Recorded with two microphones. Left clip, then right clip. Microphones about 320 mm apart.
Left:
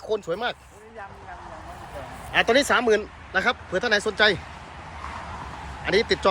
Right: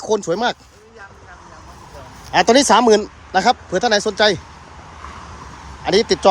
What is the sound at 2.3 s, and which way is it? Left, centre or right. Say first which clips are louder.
Speech: right 8 dB; centre.